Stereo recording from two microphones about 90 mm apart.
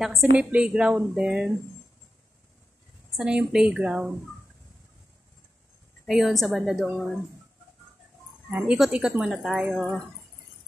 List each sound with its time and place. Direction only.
0.0 s a woman's voice: centre (ahead or behind)
0.4 s speech: 10° right (ahead or behind)
3.2 s speech: 10° right (ahead or behind)
6.0 s a woman's voice: centre (ahead or behind)
8.6 s a woman's voice: 5° right (ahead or behind)